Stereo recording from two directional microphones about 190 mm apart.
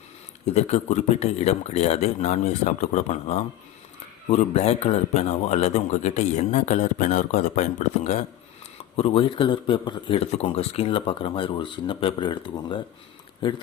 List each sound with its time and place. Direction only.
0.4 s a man's voice: 35° left (ahead or behind)